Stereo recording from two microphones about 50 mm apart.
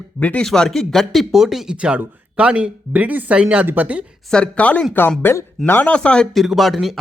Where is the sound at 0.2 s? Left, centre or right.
Left.